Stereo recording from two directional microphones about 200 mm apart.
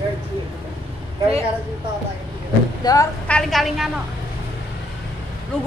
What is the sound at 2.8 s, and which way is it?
Speech, 20° left (ahead or behind).